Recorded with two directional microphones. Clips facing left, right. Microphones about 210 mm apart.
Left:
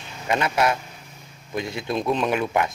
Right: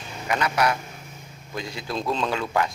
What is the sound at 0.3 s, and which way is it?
A man's voice, 25° left (ahead or behind).